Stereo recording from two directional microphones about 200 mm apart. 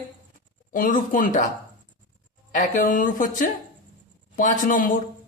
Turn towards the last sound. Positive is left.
turn(degrees=40)  # may be behind; listen again after turning